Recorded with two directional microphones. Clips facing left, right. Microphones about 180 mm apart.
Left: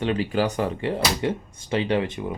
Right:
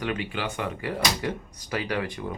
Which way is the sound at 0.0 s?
35° left (ahead or behind).